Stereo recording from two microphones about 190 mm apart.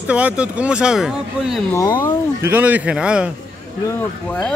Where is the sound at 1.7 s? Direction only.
15° left (ahead or behind).